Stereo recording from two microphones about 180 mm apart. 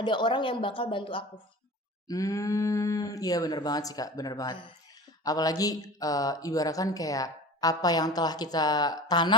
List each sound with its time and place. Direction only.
0.0 s speech: 25° left (ahead or behind)